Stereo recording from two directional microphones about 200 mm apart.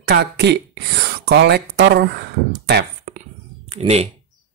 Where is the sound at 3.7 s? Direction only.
30° right (ahead or behind).